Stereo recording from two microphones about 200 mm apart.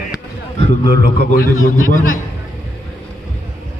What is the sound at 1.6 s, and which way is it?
Speech, 40° left (ahead or behind).